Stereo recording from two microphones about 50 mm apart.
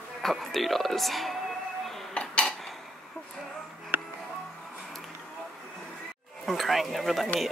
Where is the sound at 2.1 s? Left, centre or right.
Left.